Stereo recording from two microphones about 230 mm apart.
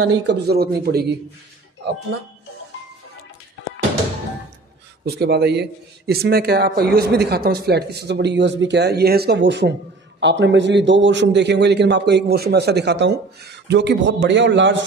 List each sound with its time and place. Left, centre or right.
0.3 s a man's voice: right
5.0 s a man's voice: right